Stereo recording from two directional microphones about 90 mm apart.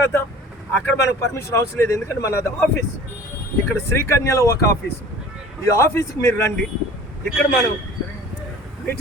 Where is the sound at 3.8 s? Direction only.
30° left (ahead or behind).